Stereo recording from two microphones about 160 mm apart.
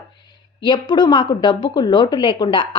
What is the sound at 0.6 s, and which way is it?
Speech, 30° left (ahead or behind).